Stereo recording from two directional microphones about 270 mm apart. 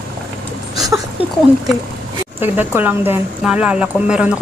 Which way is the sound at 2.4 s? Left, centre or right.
Centre.